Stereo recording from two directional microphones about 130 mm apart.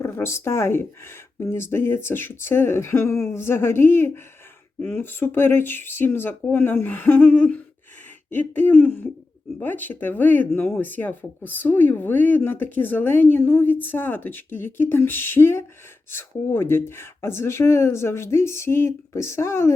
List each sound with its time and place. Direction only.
0.0 s speech: 20° left (ahead or behind)